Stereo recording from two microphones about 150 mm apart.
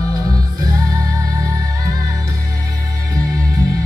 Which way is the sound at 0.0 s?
25° right (ahead or behind).